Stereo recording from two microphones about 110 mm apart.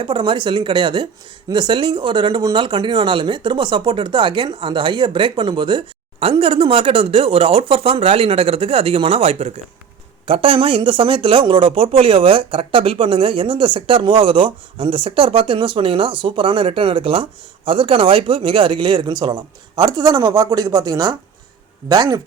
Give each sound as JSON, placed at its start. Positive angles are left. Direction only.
{"t": 0.0, "sound": "speech", "side_deg": -45}